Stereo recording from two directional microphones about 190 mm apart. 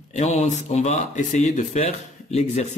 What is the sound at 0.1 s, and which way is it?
Speech, 35° left (ahead or behind).